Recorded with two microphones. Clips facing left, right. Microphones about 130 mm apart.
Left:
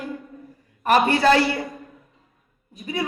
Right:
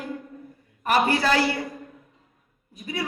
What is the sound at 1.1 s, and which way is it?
Speech, 25° left (ahead or behind).